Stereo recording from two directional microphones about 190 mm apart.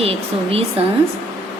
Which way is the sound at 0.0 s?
30° right (ahead or behind).